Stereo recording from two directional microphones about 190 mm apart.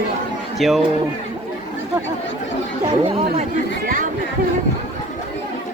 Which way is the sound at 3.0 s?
30° right (ahead or behind).